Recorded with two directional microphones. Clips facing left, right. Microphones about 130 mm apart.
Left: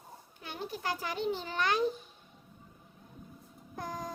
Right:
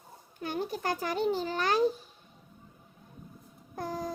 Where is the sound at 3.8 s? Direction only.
35° right (ahead or behind).